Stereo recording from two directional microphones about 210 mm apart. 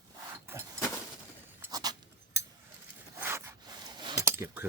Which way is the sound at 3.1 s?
10° right (ahead or behind).